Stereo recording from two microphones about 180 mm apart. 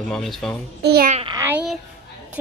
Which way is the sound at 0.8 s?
60° right (ahead or behind).